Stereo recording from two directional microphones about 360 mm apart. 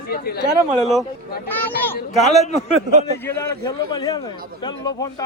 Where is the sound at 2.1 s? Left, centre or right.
Centre.